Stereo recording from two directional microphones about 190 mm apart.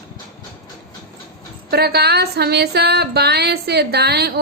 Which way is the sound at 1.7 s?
55° right (ahead or behind).